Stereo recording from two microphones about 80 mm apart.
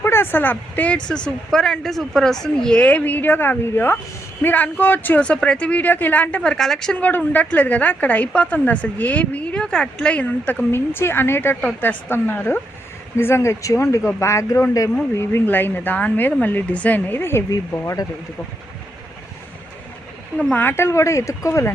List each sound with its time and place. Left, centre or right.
0.0 s a woman's voice: left; by 6.9 s centre
6.9 s a woman's voice: centre; by 14.6 s left
15.2 s a woman's voice: left
17.5 s speech: left
20.5 s a woman's voice: left